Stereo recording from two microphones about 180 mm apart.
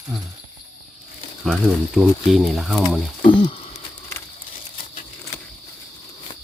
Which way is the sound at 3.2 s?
30° left (ahead or behind).